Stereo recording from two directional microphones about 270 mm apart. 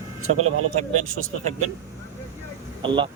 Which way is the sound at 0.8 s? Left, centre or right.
Right.